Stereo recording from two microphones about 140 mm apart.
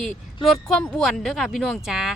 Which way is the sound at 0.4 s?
Centre (ahead or behind).